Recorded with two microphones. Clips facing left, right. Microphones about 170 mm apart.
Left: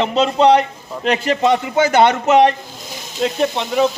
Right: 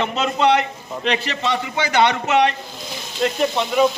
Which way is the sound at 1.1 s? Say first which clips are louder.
Left 7 dB; 45° left (ahead or behind).